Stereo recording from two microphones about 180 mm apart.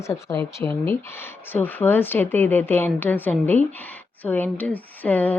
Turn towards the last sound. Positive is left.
turn(degrees=10)  # may be behind; listen again after turning